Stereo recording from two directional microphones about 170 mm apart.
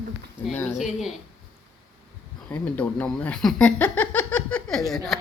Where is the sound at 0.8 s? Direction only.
Centre (ahead or behind).